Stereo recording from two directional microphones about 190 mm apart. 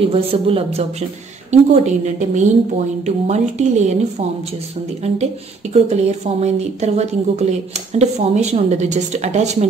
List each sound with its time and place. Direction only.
0.0 s a woman's voice: 30° right (ahead or behind)